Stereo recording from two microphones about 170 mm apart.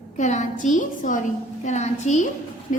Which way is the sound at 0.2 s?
45° left (ahead or behind).